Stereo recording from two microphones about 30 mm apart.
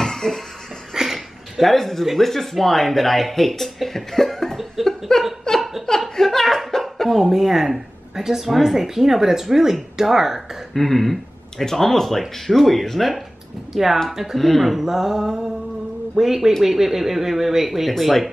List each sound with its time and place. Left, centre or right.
0.0 s music: centre
0.9 s a sound: centre
1.6 s speech: centre
5.6 s laughter: centre
5.9 s speech: centre
7.2 s speech: centre
10.7 s speech: centre
14.3 s speech: centre